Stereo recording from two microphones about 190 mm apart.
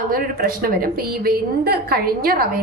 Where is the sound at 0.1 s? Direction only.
50° right (ahead or behind).